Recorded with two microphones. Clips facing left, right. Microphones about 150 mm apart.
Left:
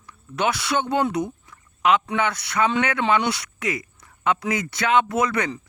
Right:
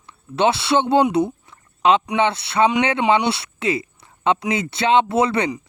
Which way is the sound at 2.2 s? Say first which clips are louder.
Right 5 dB; 25° right (ahead or behind).